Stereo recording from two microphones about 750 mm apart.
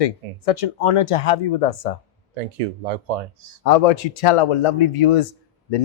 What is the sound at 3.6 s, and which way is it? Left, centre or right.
A man's voice, left.